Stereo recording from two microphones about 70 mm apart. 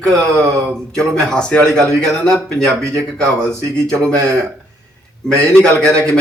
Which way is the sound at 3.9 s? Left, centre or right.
Right.